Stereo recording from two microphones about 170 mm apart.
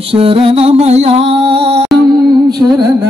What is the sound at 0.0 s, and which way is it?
Music, 35° right (ahead or behind).